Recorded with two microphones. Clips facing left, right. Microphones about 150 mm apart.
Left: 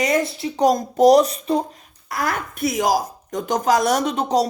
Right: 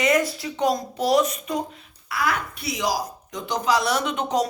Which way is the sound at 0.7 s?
45° left (ahead or behind).